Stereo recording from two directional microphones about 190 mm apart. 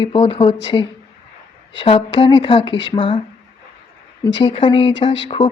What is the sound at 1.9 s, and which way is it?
Speech, 30° left (ahead or behind).